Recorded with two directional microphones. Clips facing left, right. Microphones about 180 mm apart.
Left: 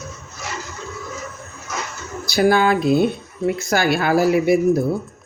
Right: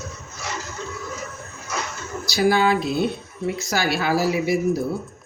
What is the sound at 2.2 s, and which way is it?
Speech, 55° left (ahead or behind).